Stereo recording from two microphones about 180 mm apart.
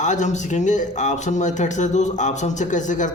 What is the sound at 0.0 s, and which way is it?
A man's voice, 40° left (ahead or behind).